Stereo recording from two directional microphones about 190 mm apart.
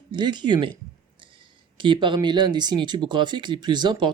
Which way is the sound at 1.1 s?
25° right (ahead or behind).